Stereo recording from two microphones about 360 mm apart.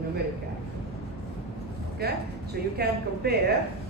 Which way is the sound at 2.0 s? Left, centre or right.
Right.